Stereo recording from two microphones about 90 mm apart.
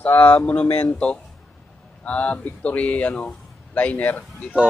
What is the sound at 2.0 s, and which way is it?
Speech, 15° left (ahead or behind).